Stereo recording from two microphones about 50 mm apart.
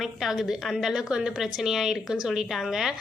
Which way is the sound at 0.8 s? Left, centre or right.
Centre.